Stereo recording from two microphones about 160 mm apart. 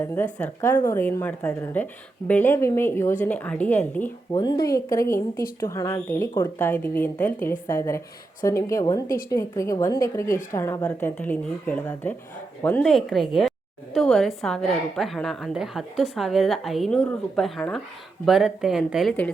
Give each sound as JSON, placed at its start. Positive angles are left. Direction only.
{"t": 0.0, "sound": "a woman's voice", "side_deg": 10}
{"t": 4.4, "sound": "a woman's voice", "side_deg": 25}
{"t": 12.8, "sound": "a woman's voice", "side_deg": 0}